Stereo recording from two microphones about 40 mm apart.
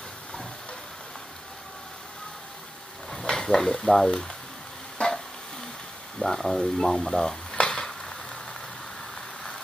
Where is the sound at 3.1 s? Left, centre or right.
Centre.